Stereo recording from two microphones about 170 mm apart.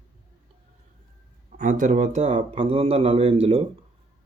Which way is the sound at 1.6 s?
50° right (ahead or behind).